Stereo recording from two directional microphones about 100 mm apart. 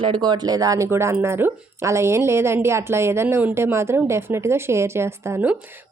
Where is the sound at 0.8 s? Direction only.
25° right (ahead or behind).